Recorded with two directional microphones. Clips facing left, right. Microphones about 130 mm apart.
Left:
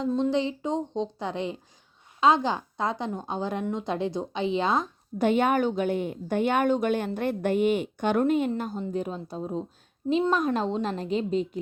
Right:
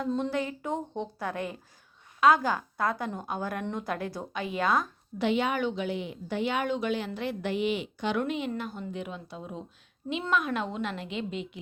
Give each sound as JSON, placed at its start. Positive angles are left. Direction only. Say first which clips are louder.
{"t": 0.1, "sound": "a woman's voice", "louder": "left 6 dB", "side_deg": 20}
{"t": 5.1, "sound": "a woman's voice", "louder": "left 5 dB", "side_deg": 45}